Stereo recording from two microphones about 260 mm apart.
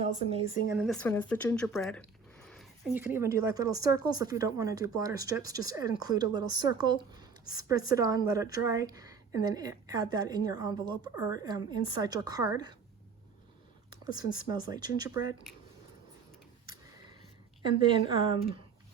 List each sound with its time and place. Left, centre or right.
0.0 s speech: right
0.7 s speech: centre
14.5 s speech: centre
17.6 s speech: centre